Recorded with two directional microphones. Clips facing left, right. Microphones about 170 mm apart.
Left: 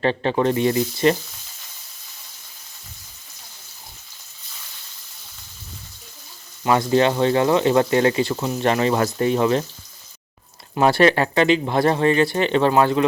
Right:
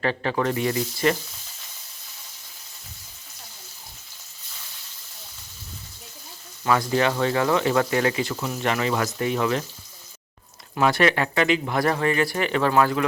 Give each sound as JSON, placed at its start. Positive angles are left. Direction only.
{"t": 0.0, "sound": "speech", "side_deg": 25}
{"t": 6.7, "sound": "speech", "side_deg": 25}
{"t": 10.8, "sound": "speech", "side_deg": 30}